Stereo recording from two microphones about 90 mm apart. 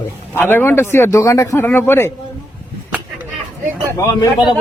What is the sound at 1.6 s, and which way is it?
Speech, 25° left (ahead or behind).